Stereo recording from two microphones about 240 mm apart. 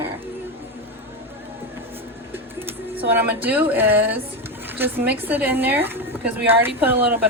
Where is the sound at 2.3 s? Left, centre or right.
Centre.